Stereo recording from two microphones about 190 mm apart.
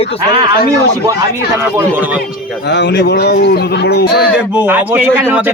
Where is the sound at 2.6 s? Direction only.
65° left (ahead or behind).